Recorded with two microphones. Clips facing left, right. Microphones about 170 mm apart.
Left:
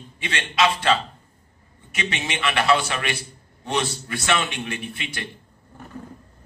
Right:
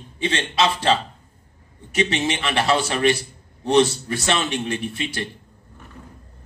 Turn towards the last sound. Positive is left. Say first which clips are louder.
# right 6 dB
turn(degrees=-35)  # may be behind; listen again after turning